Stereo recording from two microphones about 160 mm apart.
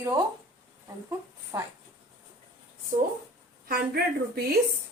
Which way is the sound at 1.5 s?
20° right (ahead or behind).